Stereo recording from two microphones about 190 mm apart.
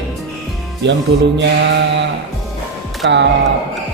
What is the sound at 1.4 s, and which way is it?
Speech, 70° right (ahead or behind).